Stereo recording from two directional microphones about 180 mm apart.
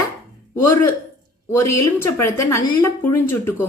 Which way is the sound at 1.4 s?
15° left (ahead or behind).